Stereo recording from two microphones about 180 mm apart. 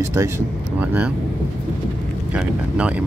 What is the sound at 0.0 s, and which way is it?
Speech, 15° right (ahead or behind).